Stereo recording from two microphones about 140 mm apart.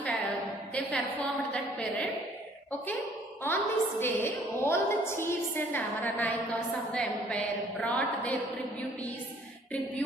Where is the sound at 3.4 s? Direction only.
15° left (ahead or behind).